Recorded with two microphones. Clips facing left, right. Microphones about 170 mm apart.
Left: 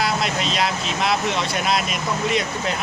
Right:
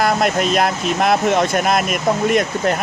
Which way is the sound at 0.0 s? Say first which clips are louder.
Right 6 dB; 50° right (ahead or behind).